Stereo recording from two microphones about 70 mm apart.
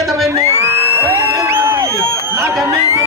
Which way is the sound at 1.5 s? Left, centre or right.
Right.